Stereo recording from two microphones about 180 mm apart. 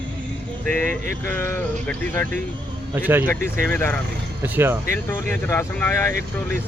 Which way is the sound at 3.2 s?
15° left (ahead or behind).